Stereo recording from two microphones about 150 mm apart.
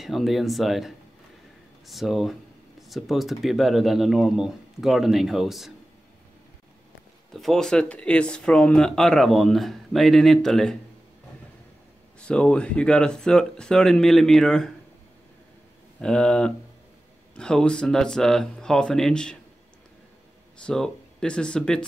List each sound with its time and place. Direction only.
0.0 s speech: centre (ahead or behind)
7.3 s speech: centre (ahead or behind)
12.2 s speech: 5° left (ahead or behind)
16.0 s speech: 5° left (ahead or behind)
20.6 s speech: 5° left (ahead or behind)